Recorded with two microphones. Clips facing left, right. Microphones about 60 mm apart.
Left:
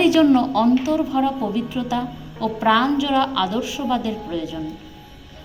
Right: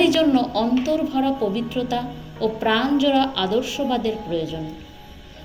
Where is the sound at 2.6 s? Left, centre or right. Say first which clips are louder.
Left 4 dB; centre.